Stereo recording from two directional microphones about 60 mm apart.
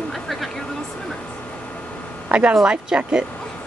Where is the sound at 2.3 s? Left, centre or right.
Centre.